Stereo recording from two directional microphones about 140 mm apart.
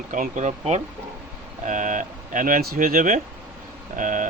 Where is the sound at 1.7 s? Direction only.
65° right (ahead or behind).